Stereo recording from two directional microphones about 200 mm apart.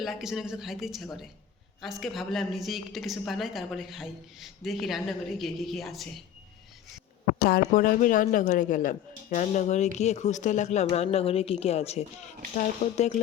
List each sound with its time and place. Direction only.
0.0 s a woman's voice: centre (ahead or behind)
7.3 s speech: 45° left (ahead or behind)